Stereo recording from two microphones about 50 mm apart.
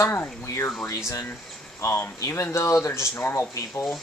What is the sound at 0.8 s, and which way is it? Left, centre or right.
Speech, left.